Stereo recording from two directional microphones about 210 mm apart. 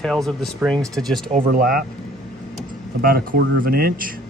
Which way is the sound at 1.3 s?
40° right (ahead or behind).